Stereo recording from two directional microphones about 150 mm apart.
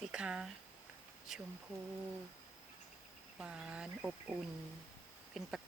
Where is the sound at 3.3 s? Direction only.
5° right (ahead or behind).